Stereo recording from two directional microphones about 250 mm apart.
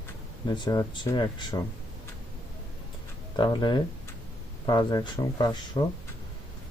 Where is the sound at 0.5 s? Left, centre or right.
Centre.